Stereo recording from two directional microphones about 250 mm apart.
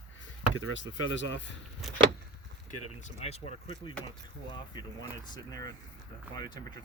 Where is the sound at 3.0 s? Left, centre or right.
Left.